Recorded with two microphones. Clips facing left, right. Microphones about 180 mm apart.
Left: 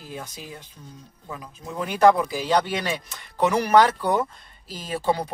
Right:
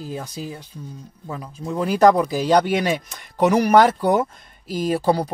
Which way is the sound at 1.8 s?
35° right (ahead or behind).